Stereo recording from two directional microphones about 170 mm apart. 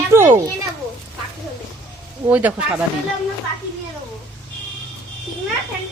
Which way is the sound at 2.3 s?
10° right (ahead or behind).